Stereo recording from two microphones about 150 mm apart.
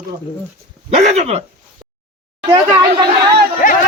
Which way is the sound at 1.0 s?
45° right (ahead or behind).